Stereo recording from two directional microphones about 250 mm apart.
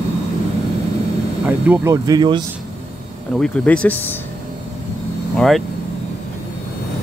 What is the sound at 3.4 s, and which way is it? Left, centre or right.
Speech, centre.